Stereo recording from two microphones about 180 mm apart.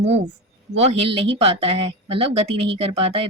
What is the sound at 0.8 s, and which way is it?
Speech, 35° right (ahead or behind).